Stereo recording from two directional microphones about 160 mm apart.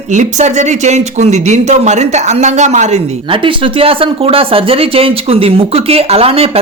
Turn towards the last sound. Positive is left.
turn(degrees=-40)  # may be behind; listen again after turning